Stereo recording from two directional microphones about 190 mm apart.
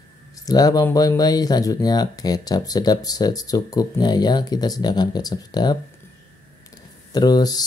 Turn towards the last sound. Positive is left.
turn(degrees=20)  # may be behind; listen again after turning